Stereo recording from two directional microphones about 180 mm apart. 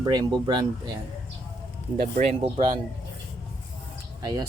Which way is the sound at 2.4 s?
25° right (ahead or behind).